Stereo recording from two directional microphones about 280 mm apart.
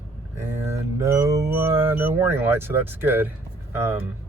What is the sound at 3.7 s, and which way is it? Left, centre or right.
Speech, centre.